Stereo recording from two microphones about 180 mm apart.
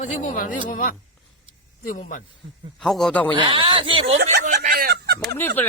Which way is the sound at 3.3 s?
25° right (ahead or behind).